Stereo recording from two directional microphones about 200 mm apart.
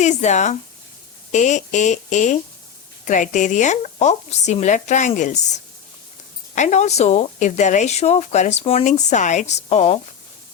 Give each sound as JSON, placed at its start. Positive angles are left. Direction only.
{"t": 0.0, "sound": "a woman's voice", "side_deg": 35}
{"t": 6.6, "sound": "a woman's voice", "side_deg": 35}